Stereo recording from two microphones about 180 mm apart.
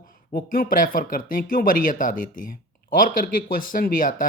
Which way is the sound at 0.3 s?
50° left (ahead or behind).